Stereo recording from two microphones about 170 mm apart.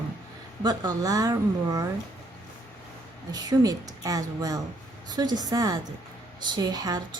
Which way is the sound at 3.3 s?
20° right (ahead or behind).